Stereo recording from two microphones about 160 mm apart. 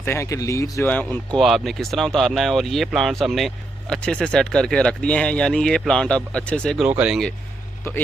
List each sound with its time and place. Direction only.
0.0 s speech: 15° left (ahead or behind)
6.8 s speech: 5° right (ahead or behind)